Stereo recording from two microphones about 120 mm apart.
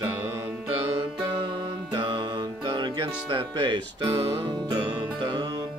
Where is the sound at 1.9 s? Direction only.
40° right (ahead or behind).